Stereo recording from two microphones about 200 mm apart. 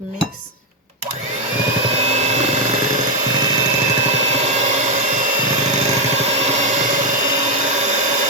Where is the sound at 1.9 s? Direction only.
35° right (ahead or behind).